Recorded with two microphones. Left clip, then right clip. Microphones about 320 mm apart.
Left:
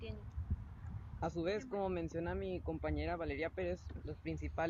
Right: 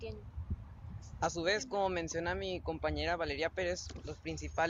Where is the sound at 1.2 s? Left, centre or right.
Right.